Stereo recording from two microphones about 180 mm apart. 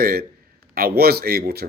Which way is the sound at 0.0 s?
55° right (ahead or behind).